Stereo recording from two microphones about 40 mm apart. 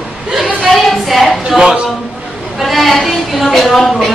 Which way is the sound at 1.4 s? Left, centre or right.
Centre.